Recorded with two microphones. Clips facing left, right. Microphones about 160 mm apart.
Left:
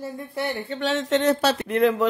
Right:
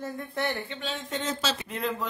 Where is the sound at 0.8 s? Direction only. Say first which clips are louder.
Left 16 dB; 80° left.